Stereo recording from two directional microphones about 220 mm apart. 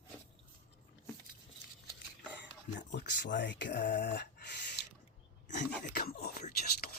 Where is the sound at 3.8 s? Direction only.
40° left (ahead or behind).